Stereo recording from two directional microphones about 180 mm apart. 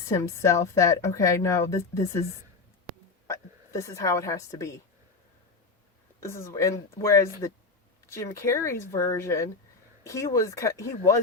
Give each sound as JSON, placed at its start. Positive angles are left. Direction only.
{"t": 0.1, "sound": "a woman's voice", "side_deg": 15}
{"t": 3.2, "sound": "a woman's voice", "side_deg": 15}
{"t": 6.1, "sound": "a woman's voice", "side_deg": 15}